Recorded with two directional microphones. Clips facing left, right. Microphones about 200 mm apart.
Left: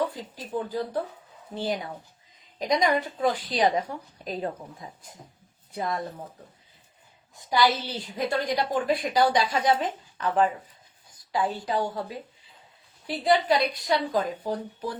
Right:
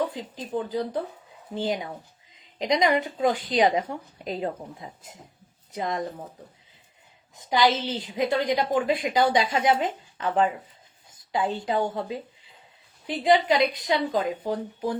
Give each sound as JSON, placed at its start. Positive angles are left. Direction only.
{"t": 0.5, "sound": "a woman's voice", "side_deg": -20}
{"t": 7.3, "sound": "a woman's voice", "side_deg": -20}
{"t": 13.5, "sound": "a woman's voice", "side_deg": -20}